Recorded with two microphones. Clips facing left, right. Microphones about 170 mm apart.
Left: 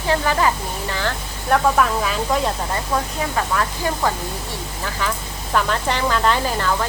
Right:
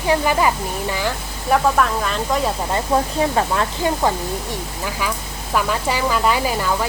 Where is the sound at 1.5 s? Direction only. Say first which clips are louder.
Even; 5° left (ahead or behind).